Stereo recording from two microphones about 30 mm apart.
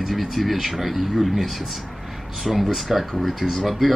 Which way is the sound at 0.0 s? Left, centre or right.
Centre.